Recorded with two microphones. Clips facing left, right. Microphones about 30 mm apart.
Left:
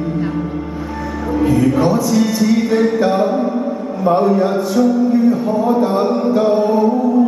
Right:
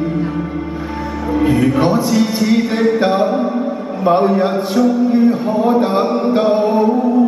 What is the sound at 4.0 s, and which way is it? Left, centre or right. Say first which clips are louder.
Speech: right 1 dB; right.